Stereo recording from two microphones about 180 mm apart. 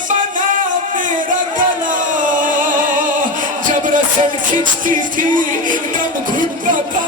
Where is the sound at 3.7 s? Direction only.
45° right (ahead or behind).